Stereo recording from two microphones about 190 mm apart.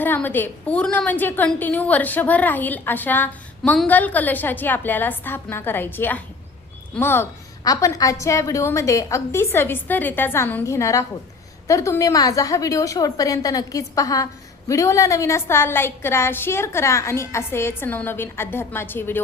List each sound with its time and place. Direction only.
0.0 s a woman's voice: 10° left (ahead or behind)